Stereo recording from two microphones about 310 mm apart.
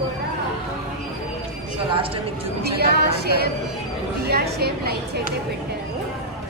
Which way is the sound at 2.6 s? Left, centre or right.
Right.